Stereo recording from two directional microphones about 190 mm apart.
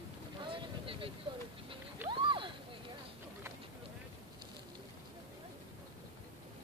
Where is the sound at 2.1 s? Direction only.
25° right (ahead or behind).